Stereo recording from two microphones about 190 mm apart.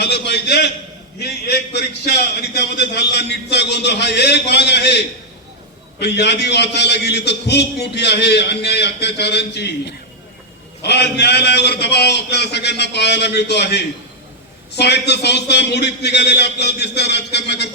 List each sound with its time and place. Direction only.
0.0 s a sound: 60° left (ahead or behind)
1.2 s a man's voice: 60° left (ahead or behind)
10.8 s a man's voice: 60° left (ahead or behind)